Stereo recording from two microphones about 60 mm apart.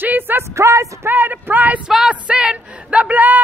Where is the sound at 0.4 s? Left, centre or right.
Right.